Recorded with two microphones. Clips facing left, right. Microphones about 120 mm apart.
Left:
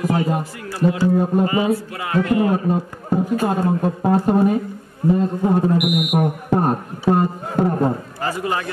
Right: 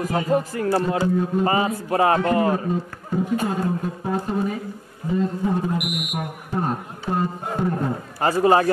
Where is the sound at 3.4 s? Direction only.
55° left (ahead or behind).